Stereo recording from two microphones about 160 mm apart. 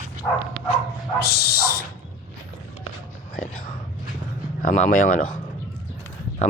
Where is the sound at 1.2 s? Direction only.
90° left.